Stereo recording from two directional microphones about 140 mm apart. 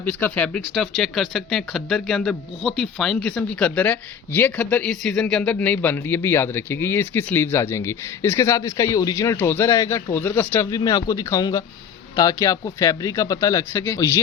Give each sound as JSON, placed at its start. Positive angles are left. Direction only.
{"t": 0.0, "sound": "speech", "side_deg": 10}
{"t": 10.7, "sound": "speech", "side_deg": 25}